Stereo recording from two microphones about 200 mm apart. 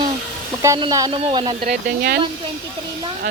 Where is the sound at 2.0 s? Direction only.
50° right (ahead or behind).